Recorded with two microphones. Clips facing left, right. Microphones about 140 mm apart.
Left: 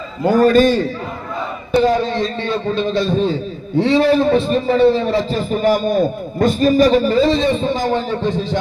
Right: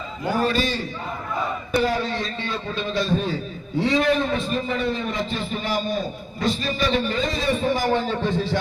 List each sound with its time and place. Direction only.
0.3 s a man's voice: 45° left (ahead or behind)
1.7 s a man's voice: 25° left (ahead or behind)